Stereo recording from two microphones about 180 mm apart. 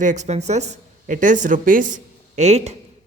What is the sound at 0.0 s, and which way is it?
A woman's voice, 40° right (ahead or behind).